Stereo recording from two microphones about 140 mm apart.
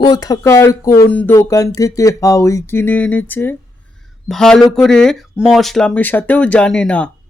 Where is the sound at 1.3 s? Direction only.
25° left (ahead or behind).